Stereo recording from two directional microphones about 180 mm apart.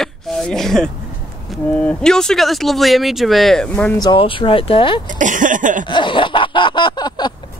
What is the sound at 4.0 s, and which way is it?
Speech, 25° left (ahead or behind).